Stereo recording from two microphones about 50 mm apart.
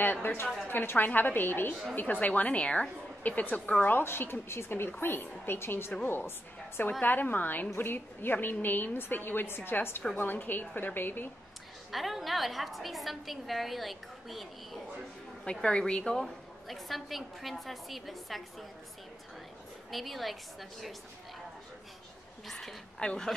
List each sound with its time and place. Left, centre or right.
0.0 s a woman's voice: left
2.0 s a woman's voice: left
4.0 s a woman's voice: left
7.0 s a woman's voice: left
11.9 s a woman's voice: centre
15.6 s a woman's voice: centre
16.6 s a woman's voice: centre
19.9 s a woman's voice: centre
22.5 s a woman's voice: centre